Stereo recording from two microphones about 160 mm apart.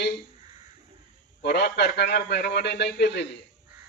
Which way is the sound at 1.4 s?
90° left.